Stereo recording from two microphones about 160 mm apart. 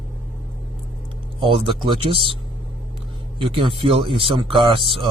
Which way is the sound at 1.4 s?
30° right (ahead or behind).